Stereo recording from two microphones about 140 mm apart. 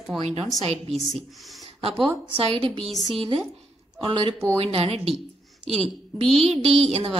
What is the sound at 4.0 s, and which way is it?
A woman's voice, 40° right (ahead or behind).